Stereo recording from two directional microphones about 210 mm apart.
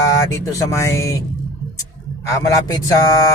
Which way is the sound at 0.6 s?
15° left (ahead or behind).